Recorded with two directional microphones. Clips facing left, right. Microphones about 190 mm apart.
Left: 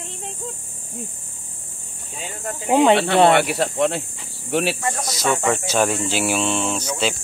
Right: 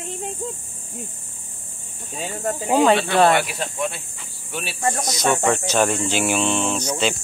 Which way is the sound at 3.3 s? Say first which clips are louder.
Left 4 dB; 65° left (ahead or behind).